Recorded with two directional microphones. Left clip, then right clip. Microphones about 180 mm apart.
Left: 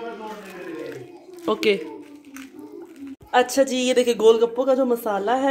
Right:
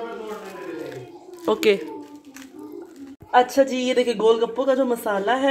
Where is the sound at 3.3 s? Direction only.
5° right (ahead or behind).